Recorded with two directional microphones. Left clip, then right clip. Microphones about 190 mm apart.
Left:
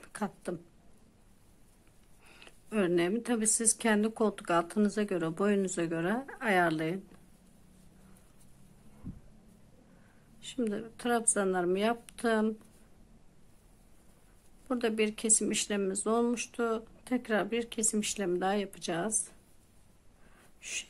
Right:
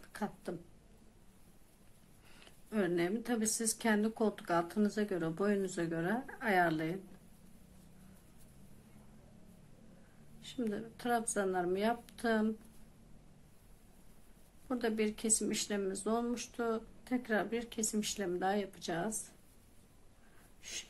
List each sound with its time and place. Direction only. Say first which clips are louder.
0.0 s a sound: left 4 dB; 40° left (ahead or behind)
2.2 s speech: left 5 dB; 40° left (ahead or behind)
10.4 s speech: left 5 dB; 40° left (ahead or behind)
14.7 s speech: left 5 dB; 40° left (ahead or behind)